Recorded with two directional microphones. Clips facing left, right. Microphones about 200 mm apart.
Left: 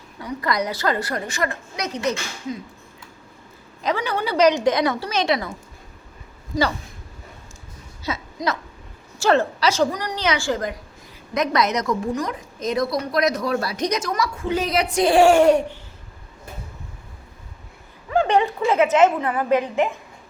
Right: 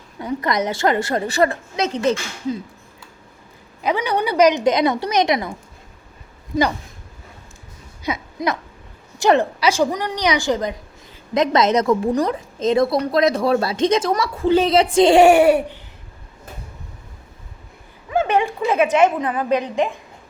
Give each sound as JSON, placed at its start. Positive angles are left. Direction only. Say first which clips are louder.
{"t": 0.2, "sound": "a woman's voice", "louder": "right 3 dB", "side_deg": -25}
{"t": 3.8, "sound": "a woman's voice", "louder": "right 3 dB", "side_deg": -15}
{"t": 8.0, "sound": "a sound", "louder": "right 3 dB", "side_deg": -15}
{"t": 9.1, "sound": "a woman's voice", "louder": "right 2 dB", "side_deg": -15}
{"t": 18.3, "sound": "a woman's voice", "louder": "right 1 dB", "side_deg": -20}